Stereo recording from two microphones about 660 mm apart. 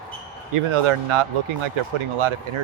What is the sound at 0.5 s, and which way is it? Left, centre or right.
Speech, right.